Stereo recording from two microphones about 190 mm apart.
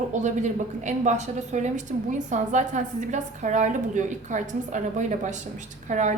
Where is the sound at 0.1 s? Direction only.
40° right (ahead or behind).